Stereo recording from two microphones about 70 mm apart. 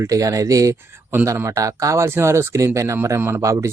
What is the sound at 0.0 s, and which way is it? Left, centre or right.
Speech, right.